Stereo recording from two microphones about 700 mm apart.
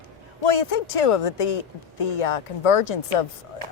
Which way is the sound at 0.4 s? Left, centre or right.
Left.